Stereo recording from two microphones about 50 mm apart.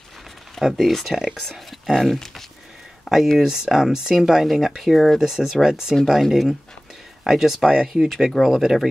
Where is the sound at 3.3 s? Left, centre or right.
Centre.